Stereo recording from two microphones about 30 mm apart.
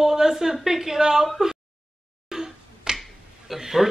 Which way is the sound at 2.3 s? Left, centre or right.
Centre.